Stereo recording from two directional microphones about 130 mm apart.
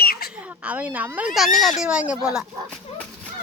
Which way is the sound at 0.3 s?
10° right (ahead or behind).